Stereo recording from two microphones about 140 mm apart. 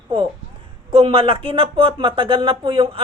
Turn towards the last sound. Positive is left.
turn(degrees=-40)  # may be behind; listen again after turning